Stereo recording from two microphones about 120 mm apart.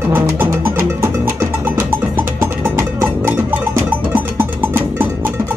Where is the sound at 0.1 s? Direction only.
20° right (ahead or behind).